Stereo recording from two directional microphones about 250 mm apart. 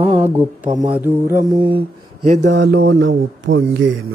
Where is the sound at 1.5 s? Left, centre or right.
Centre.